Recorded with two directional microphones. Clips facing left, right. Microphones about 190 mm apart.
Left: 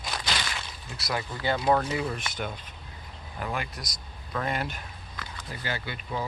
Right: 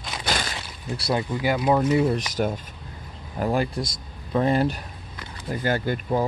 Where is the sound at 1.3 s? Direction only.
10° right (ahead or behind).